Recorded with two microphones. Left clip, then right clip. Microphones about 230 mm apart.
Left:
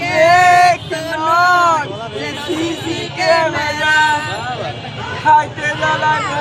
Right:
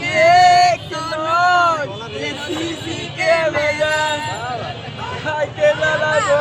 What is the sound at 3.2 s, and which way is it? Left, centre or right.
Music, centre.